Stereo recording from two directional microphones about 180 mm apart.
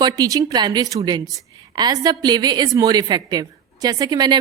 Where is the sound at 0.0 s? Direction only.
20° right (ahead or behind).